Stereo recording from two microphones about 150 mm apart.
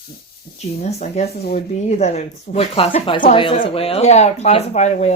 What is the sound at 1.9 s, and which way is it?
Speech, 50° left (ahead or behind).